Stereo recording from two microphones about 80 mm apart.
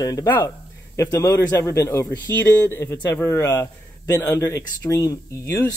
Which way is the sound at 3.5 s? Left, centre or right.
Left.